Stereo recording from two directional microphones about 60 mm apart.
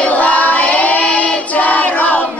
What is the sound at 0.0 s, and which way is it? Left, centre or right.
Child singing, left.